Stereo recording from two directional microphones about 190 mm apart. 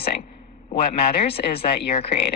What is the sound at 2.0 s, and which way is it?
Speech, 30° left (ahead or behind).